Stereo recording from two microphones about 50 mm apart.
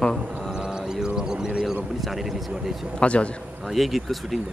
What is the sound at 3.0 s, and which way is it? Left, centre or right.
Speech, left.